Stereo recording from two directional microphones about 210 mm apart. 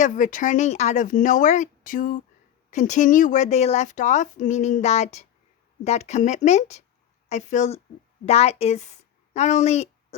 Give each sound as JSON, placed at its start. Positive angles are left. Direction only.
{"t": 0.0, "sound": "a woman's voice", "side_deg": 40}